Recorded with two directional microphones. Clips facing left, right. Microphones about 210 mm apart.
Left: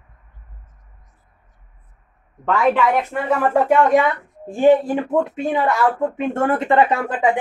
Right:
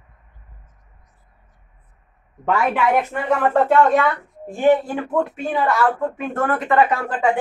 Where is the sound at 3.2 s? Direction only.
10° left (ahead or behind); by 6.8 s 25° left (ahead or behind).